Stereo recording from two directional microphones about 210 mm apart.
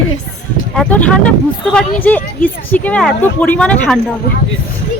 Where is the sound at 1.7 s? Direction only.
5° left (ahead or behind).